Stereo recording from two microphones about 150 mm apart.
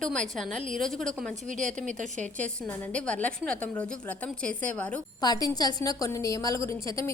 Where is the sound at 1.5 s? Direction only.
55° right (ahead or behind).